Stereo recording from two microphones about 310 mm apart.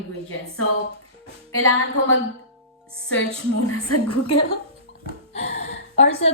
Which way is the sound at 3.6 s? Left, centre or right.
Left.